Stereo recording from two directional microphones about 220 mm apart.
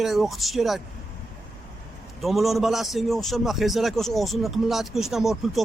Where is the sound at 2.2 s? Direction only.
Centre (ahead or behind).